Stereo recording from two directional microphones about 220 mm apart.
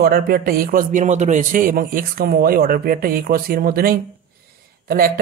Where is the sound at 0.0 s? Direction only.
45° right (ahead or behind).